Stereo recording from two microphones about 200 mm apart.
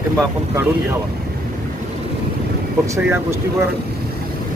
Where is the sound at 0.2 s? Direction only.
15° right (ahead or behind).